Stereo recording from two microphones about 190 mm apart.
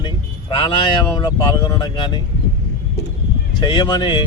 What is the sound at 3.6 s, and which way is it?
Speech, 25° left (ahead or behind).